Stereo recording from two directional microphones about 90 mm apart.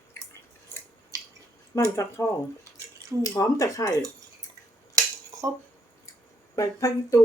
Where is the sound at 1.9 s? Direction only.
35° left (ahead or behind).